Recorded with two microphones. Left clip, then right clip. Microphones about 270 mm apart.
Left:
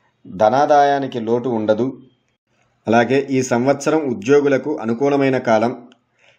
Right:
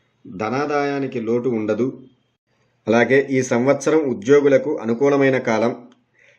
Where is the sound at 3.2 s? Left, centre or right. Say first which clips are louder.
Left 1 dB; centre.